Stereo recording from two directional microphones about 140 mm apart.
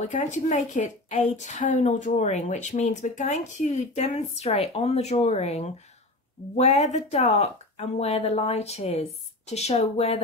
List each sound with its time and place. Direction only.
0.1 s a woman's voice: 60° left (ahead or behind)